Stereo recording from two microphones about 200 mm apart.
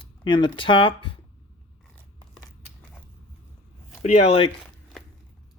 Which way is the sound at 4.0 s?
30° left (ahead or behind).